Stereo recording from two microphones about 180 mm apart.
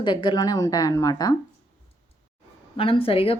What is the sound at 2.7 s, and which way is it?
Speech, 30° left (ahead or behind).